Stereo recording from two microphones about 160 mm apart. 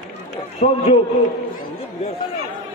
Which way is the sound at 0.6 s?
45° left (ahead or behind).